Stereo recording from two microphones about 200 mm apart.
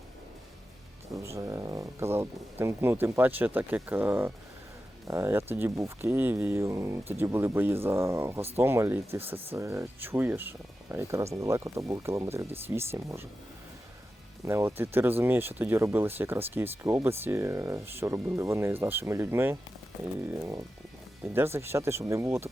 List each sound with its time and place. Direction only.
1.1 s speech: 15° right (ahead or behind)
14.4 s speech: 15° right (ahead or behind)